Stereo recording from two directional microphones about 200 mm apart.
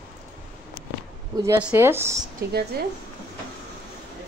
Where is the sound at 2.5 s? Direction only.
55° right (ahead or behind).